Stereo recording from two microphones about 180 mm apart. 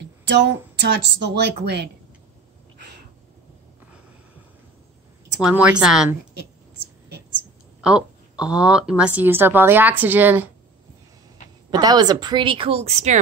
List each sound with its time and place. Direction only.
0.0 s speech: 75° right (ahead or behind)
5.4 s a woman's voice: 5° right (ahead or behind)
7.8 s a woman's voice: 5° right (ahead or behind)
11.7 s a woman's voice: 20° right (ahead or behind); by 13.2 s 40° right (ahead or behind)